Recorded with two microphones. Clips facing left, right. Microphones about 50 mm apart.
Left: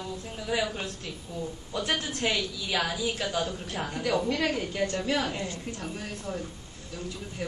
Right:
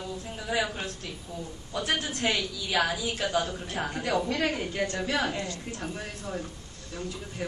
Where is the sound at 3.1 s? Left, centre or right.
Centre.